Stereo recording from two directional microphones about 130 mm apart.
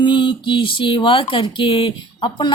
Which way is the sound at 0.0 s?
35° left (ahead or behind).